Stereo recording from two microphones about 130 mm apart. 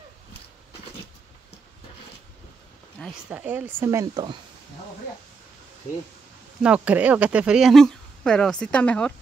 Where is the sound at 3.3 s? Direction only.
15° right (ahead or behind); by 4.3 s 30° right (ahead or behind).